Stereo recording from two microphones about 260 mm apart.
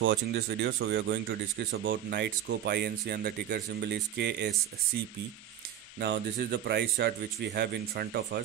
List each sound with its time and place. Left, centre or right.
0.0 s speech: right
5.9 s speech: right